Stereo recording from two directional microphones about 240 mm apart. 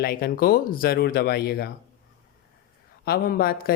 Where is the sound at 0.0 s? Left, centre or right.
Left.